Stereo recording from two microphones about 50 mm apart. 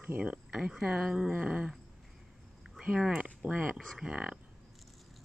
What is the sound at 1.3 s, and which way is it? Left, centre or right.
Speech, right.